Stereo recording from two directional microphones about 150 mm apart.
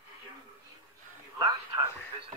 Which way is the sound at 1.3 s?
25° right (ahead or behind).